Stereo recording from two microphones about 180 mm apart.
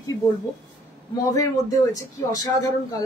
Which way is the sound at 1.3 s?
20° left (ahead or behind).